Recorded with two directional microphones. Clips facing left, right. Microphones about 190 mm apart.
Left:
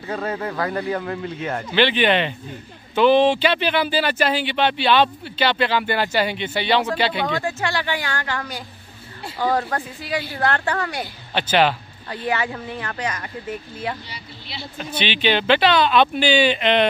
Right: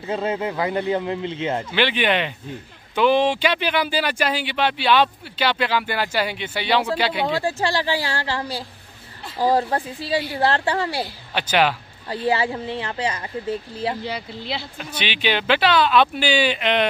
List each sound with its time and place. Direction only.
0.0 s speech: 20° right (ahead or behind)
1.8 s speech: 10° right (ahead or behind)
7.3 s speech: 35° right (ahead or behind)
11.3 s speech: 10° right (ahead or behind)
12.3 s speech: 30° right (ahead or behind)
15.0 s speech: 10° right (ahead or behind)